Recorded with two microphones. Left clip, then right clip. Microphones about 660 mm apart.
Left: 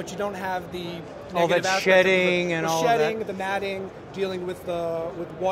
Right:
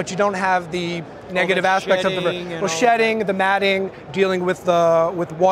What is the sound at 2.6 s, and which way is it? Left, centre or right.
A man's voice, right.